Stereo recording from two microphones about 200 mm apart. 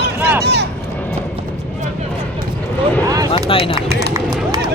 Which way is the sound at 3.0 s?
15° right (ahead or behind).